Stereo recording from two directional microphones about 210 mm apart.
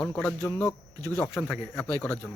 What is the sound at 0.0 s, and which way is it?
Speech, 5° left (ahead or behind).